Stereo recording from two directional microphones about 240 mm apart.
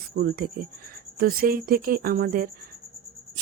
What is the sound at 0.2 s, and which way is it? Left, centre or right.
Speech, right.